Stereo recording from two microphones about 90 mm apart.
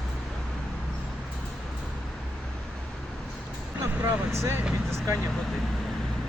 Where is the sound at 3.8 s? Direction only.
30° right (ahead or behind).